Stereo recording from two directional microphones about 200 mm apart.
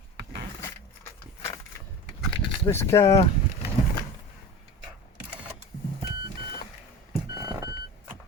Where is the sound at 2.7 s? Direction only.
15° left (ahead or behind).